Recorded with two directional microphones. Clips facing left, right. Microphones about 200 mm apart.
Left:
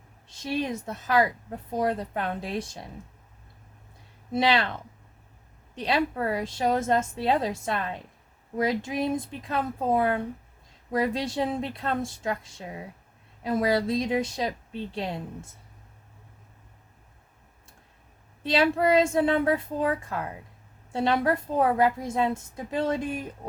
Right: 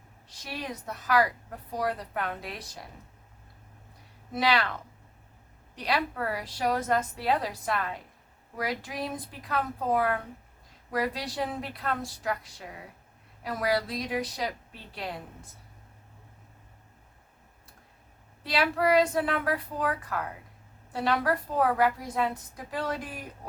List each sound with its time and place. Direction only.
0.3 s a woman's voice: 25° left (ahead or behind)
4.3 s a woman's voice: 25° left (ahead or behind)
18.4 s a woman's voice: 25° left (ahead or behind)